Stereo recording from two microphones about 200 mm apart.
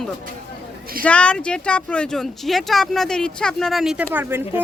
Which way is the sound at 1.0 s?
5° left (ahead or behind).